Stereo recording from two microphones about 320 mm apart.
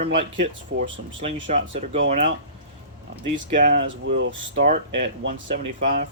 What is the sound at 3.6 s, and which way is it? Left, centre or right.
Speech, right.